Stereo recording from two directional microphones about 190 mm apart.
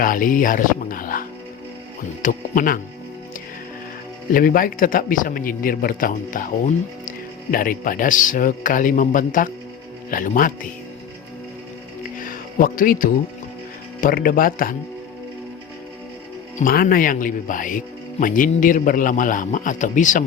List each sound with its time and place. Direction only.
0.0 s speech: 45° left (ahead or behind)
4.3 s speech: 50° left (ahead or behind)
12.2 s music: 50° left (ahead or behind)
14.0 s speech: 50° left (ahead or behind)
16.6 s speech: 50° left (ahead or behind)